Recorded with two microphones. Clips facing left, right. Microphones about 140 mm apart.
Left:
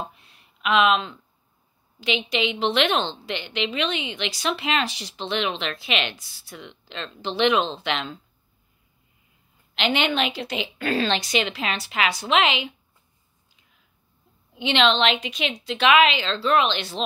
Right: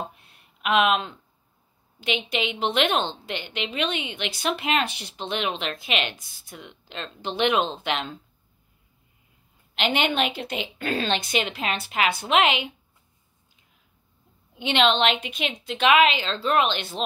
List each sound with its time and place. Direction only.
0.2 s a sound: 50° right (ahead or behind)
2.0 s a woman's voice: 55° right (ahead or behind)
9.8 s a woman's voice: 50° right (ahead or behind)
14.6 s a woman's voice: 45° right (ahead or behind)